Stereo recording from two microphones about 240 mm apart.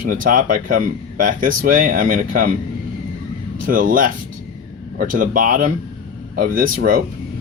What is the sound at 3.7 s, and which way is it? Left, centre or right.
Speech, right.